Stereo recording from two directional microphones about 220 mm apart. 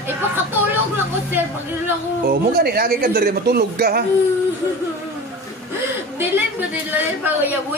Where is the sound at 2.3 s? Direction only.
45° right (ahead or behind).